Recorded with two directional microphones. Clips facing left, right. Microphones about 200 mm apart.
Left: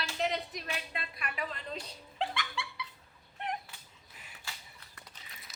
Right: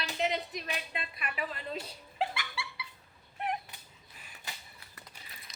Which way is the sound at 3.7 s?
20° right (ahead or behind).